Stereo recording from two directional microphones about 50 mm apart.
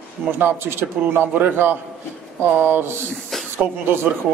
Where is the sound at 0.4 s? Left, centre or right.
Right.